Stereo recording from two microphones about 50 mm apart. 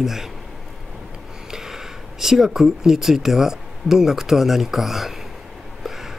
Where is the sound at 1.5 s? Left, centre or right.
Centre.